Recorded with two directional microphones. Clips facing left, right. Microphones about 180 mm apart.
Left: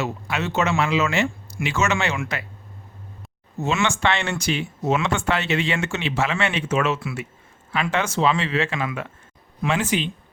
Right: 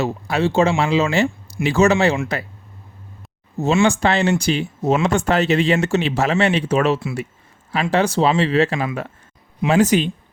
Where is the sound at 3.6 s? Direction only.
35° right (ahead or behind).